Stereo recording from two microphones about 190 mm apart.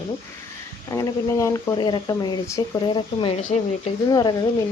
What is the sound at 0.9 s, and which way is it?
Speech, 15° left (ahead or behind).